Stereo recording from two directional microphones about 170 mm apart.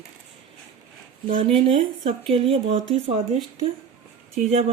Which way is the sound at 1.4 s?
30° right (ahead or behind).